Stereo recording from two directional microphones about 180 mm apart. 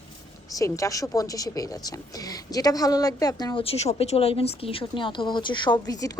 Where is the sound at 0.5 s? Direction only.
20° left (ahead or behind).